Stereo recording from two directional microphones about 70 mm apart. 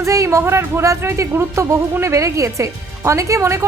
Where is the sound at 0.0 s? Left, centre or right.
Right.